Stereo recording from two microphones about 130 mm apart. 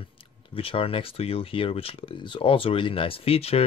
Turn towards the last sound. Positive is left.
turn(degrees=50)  # may be behind; listen again after turning